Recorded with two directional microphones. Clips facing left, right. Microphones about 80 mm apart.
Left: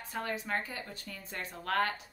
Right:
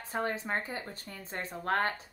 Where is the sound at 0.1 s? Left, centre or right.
Right.